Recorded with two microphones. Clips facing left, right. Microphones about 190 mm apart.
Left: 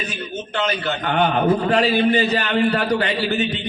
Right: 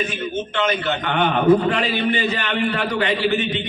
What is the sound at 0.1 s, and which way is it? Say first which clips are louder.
A man's voice: right 3 dB; 40° left (ahead or behind).